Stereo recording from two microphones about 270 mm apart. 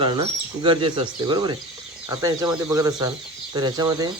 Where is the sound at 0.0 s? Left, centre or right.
Centre.